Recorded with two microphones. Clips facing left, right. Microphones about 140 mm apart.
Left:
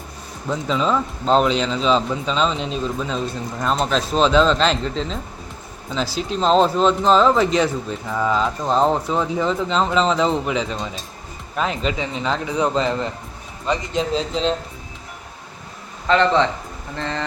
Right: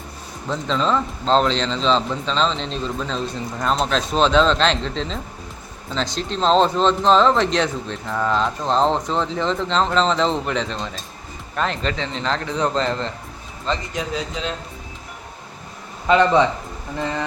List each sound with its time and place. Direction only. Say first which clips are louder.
0.4 s a man's voice: left 1 dB; 5° left (ahead or behind)
13.9 s speech: left 5 dB; 25° left (ahead or behind)
16.0 s speech: right 1 dB; 15° right (ahead or behind)